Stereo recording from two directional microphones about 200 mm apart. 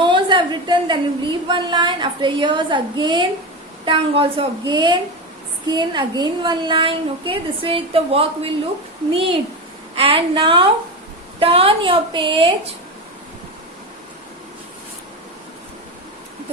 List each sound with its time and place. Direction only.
0.0 s a woman's voice: 25° right (ahead or behind)